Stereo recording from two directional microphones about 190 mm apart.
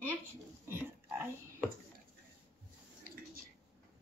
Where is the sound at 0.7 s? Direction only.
10° right (ahead or behind).